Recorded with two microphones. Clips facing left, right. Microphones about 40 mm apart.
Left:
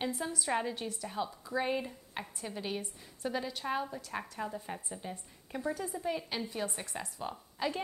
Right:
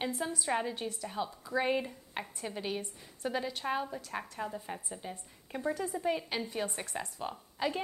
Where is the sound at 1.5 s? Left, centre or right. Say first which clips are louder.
Right 2 dB; centre.